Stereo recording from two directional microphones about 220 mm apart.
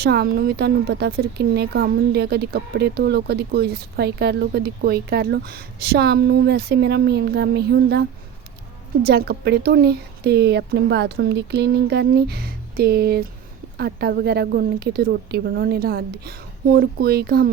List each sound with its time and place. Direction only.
0.0 s speech: 45° right (ahead or behind)
9.0 s speech: 45° right (ahead or behind)